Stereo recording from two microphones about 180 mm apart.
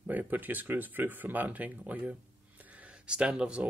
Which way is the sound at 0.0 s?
10° right (ahead or behind).